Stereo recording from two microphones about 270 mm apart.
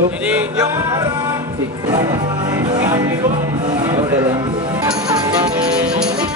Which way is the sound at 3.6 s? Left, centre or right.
Centre.